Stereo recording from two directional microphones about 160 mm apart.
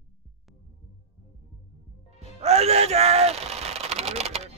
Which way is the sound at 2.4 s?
40° right (ahead or behind).